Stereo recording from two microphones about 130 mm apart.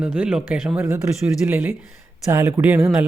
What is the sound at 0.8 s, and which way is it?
Speech, 15° right (ahead or behind).